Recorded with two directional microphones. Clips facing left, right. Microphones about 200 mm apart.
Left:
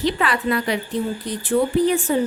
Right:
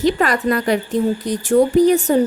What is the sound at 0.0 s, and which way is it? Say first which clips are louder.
Speech: right 5 dB; 45° right (ahead or behind).